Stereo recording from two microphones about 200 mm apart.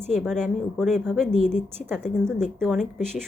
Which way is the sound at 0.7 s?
Centre (ahead or behind).